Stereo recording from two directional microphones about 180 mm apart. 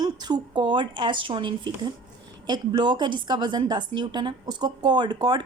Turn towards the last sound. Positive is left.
turn(degrees=-25)  # may be behind; listen again after turning